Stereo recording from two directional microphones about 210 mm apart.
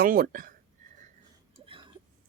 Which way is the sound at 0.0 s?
40° right (ahead or behind).